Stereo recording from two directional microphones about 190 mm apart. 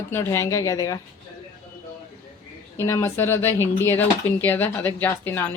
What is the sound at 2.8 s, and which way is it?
Speech, 15° left (ahead or behind).